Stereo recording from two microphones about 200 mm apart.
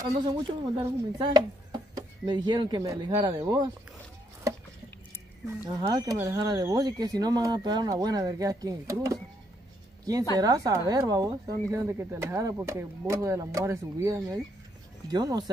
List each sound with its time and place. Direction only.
0.3 s speech: 20° right (ahead or behind)
5.7 s speech: 15° right (ahead or behind)
10.4 s speech: 15° right (ahead or behind)